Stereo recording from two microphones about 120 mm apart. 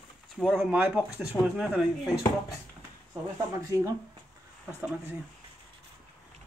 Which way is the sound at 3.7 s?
25° right (ahead or behind).